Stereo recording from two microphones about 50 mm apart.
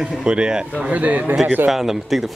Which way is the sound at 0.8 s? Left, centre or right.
Right.